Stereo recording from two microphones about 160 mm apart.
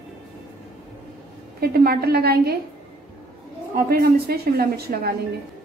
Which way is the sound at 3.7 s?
65° right (ahead or behind).